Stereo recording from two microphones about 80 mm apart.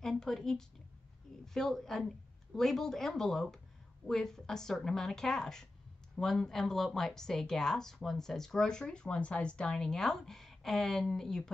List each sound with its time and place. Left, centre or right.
0.0 s a woman's voice: centre